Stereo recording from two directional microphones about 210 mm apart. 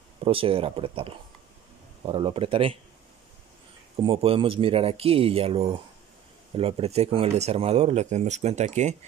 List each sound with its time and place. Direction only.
0.2 s speech: 25° right (ahead or behind)
4.0 s speech: 25° right (ahead or behind)